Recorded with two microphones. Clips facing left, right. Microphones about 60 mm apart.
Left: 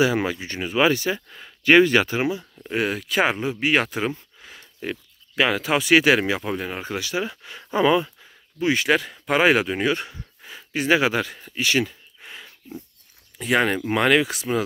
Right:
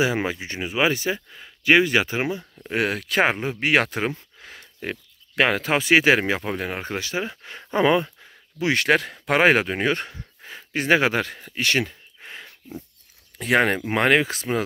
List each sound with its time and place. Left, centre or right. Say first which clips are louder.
0.0 s speech: left 2 dB; right
1.6 s speech: left 2 dB; centre
2.7 s speech: even; right
6.9 s speech: left 1 dB; right
8.5 s speech: even; right
13.3 s a sound: even; right
13.7 s speech: even; right